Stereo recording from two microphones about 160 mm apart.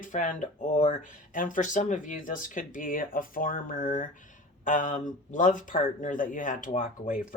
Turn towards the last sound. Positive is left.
turn(degrees=60)  # may be behind; listen again after turning